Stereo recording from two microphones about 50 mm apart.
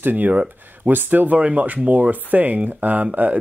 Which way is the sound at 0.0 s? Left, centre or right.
Right.